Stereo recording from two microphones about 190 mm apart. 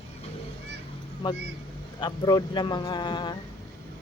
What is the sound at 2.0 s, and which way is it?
Speech, 20° left (ahead or behind).